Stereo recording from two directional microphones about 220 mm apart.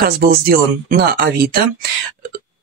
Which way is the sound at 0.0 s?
45° right (ahead or behind).